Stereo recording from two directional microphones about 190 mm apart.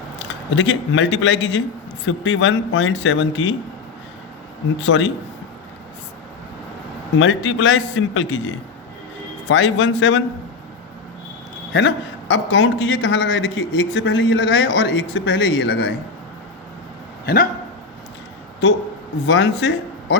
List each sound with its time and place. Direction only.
0.2 s speech: 80° left
4.8 s speech: 80° left
7.2 s a man's voice: 85° left
11.7 s a man's voice: 70° left (ahead or behind)
17.2 s speech: 50° left (ahead or behind)
19.2 s speech: 70° left (ahead or behind)